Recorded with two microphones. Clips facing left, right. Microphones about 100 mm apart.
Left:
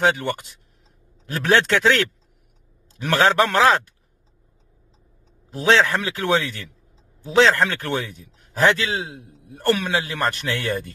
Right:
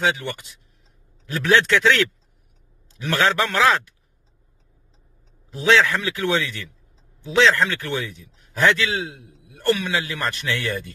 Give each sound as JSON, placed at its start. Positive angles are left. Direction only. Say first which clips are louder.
{"t": 0.0, "sound": "a man's voice", "louder": "left 3 dB", "side_deg": 50}
{"t": 5.5, "sound": "a man's voice", "louder": "even", "side_deg": 40}